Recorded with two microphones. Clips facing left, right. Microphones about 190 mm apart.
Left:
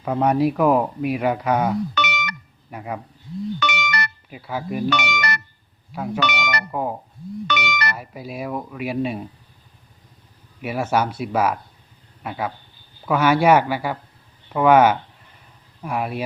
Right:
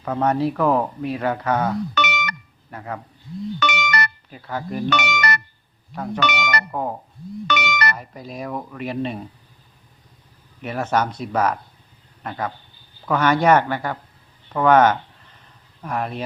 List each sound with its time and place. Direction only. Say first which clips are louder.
0.0 s speech: left 2 dB; 10° left (ahead or behind)
2.0 s a sound: right 1 dB; 50° right (ahead or behind)
2.6 s speech: left 1 dB; 10° left (ahead or behind)
3.6 s a sound: right 2 dB; 50° right (ahead or behind)
4.3 s speech: left 1 dB; 10° left (ahead or behind)
4.9 s speech: right 4 dB; 50° right (ahead or behind)
6.7 s speech: left 1 dB; 5° left (ahead or behind)
7.4 s music: right 2 dB; 50° right (ahead or behind)
7.9 s speech: left 2 dB; 10° left (ahead or behind)
10.6 s speech: left 1 dB; 10° left (ahead or behind)